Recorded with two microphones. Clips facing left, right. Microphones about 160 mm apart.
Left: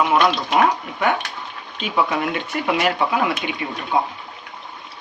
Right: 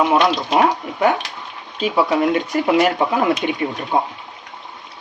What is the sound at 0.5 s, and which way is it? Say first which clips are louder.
Speech: right 2 dB; 35° right (ahead or behind).